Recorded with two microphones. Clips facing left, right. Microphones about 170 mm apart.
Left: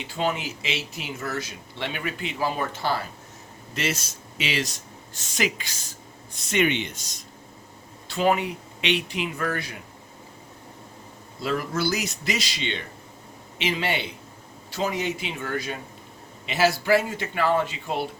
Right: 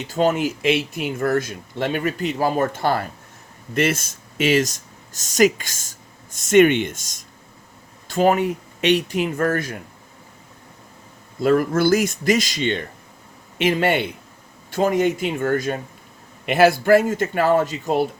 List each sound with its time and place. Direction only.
0.0 s speech: 45° right (ahead or behind)
11.3 s speech: 50° right (ahead or behind)